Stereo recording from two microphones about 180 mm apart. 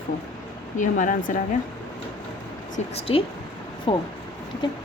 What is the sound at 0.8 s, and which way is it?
Speech, 45° left (ahead or behind).